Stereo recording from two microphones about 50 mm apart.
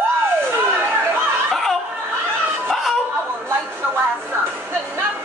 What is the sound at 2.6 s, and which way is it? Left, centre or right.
Snicker, centre.